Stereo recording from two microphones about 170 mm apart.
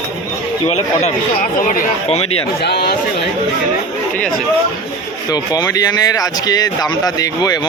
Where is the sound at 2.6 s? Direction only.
75° left (ahead or behind).